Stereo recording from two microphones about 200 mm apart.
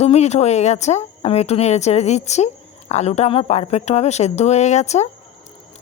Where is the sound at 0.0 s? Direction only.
30° left (ahead or behind).